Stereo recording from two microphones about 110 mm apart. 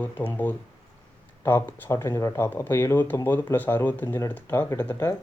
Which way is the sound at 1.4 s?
20° left (ahead or behind).